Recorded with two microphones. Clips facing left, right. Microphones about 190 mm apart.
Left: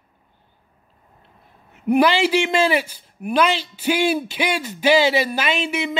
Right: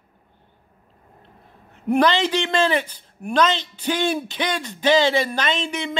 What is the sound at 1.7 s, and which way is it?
A man's voice, 5° left (ahead or behind).